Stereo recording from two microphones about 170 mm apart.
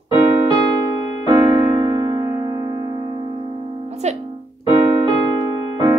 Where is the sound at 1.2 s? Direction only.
25° right (ahead or behind).